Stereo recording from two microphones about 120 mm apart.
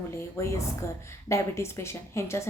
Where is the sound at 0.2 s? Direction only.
25° left (ahead or behind).